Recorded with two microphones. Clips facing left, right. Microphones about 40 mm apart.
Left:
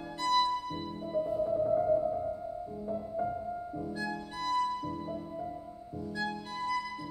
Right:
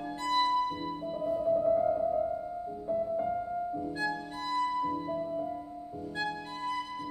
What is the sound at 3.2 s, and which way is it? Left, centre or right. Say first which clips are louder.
Music: right 3 dB; right.